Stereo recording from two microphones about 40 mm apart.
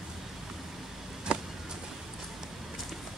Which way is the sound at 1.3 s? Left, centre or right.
Right.